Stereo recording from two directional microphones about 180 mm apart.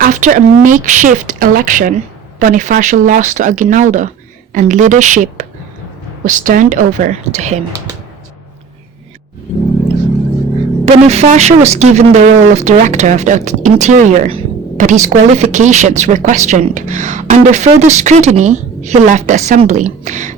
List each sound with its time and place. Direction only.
0.0 s speech: 45° right (ahead or behind)
10.8 s speech: 35° right (ahead or behind)